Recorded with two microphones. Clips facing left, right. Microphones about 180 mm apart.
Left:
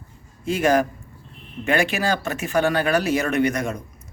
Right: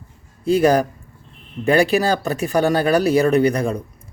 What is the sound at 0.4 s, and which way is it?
Speech, 35° right (ahead or behind).